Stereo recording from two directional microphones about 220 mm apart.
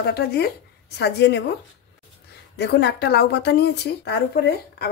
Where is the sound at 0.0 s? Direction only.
45° left (ahead or behind).